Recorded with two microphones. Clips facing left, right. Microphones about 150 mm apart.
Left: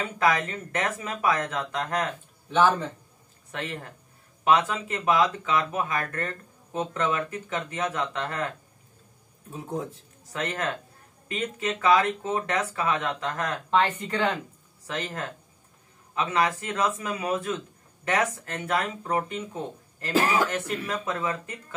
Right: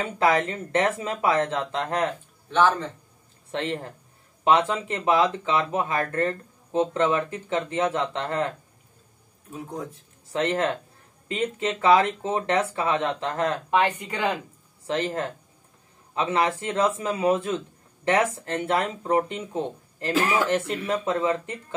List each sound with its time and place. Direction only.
0.2 s speech: 30° right (ahead or behind)
3.5 s speech: 30° right (ahead or behind)
10.3 s speech: 30° right (ahead or behind)
13.7 s speech: 15° right (ahead or behind)
14.9 s speech: 25° right (ahead or behind)